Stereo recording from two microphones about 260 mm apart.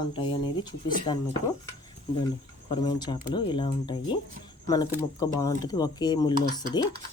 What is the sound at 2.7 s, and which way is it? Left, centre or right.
Speech, centre.